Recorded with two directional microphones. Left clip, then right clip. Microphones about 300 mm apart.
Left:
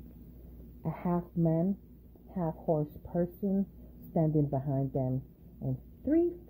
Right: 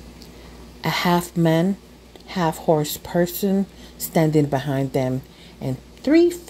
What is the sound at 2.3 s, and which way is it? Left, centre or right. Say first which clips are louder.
Speech: right 12 dB; right.